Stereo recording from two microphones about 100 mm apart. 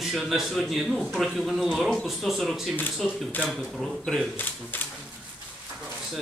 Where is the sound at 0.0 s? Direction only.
5° right (ahead or behind).